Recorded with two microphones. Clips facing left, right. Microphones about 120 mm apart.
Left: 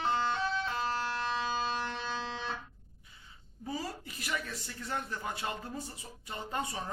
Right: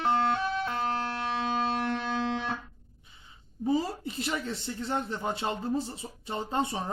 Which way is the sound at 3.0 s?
25° right (ahead or behind).